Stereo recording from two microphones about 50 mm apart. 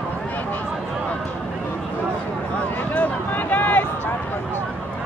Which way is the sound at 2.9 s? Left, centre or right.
Left.